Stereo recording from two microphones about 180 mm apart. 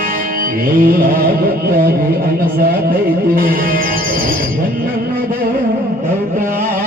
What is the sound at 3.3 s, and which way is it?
Music, 55° right (ahead or behind).